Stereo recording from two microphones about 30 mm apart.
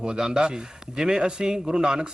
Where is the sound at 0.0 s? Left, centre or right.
Right.